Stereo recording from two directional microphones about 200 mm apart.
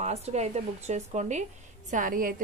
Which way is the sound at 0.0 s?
35° right (ahead or behind).